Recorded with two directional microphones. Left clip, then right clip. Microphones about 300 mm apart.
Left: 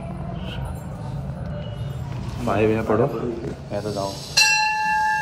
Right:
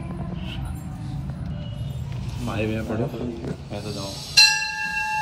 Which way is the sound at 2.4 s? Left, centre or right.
Centre.